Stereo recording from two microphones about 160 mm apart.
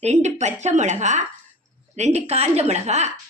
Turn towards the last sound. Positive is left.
turn(degrees=-45)  # may be behind; listen again after turning